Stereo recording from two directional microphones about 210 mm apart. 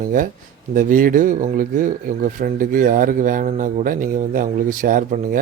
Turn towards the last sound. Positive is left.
turn(degrees=-40)  # may be behind; listen again after turning